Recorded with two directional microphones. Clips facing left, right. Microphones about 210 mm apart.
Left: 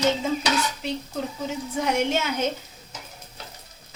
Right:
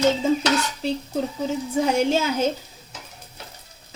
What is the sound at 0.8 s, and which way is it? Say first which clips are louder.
Speech: right 4 dB; 30° right (ahead or behind).